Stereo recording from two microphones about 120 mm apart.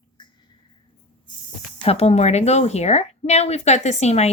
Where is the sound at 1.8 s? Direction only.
60° left (ahead or behind).